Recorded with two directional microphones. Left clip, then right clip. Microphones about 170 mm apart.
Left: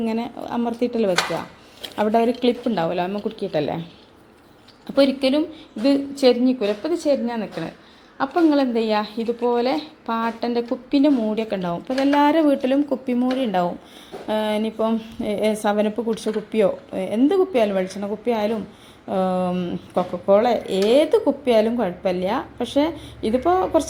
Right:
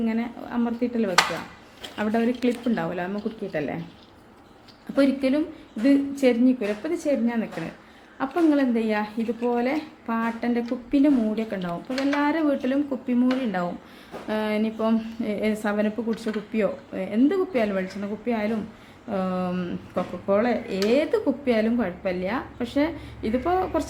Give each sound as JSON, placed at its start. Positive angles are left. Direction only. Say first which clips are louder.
{"t": 0.0, "sound": "speech", "louder": "left 3 dB", "side_deg": 30}
{"t": 2.0, "sound": "speech", "louder": "left 6 dB", "side_deg": 20}
{"t": 4.9, "sound": "speech", "louder": "left 4 dB", "side_deg": 15}